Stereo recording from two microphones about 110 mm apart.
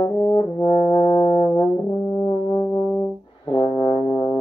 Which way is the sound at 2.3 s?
40° left (ahead or behind).